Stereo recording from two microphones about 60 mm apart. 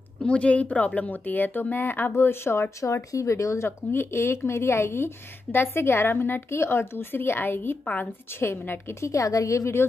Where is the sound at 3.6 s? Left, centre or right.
Left.